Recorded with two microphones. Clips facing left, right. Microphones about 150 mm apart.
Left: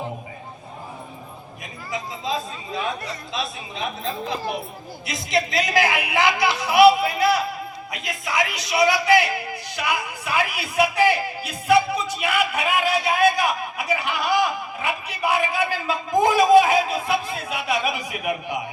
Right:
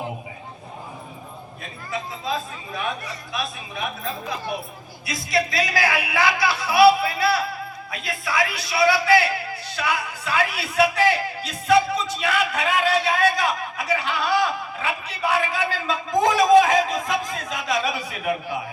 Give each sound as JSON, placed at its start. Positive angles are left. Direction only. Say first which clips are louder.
{"t": 1.9, "sound": "a man's voice", "louder": "even", "side_deg": 20}
{"t": 5.0, "sound": "a man's voice", "louder": "even", "side_deg": 20}